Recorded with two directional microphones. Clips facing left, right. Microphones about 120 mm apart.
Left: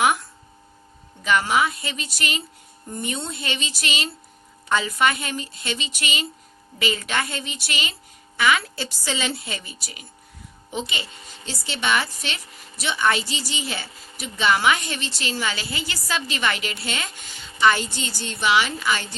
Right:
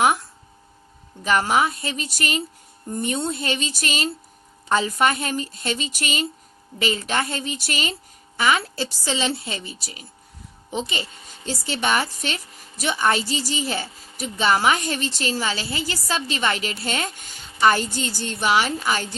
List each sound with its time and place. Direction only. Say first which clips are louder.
1.2 s a woman's voice: right 1 dB; 40° right (ahead or behind)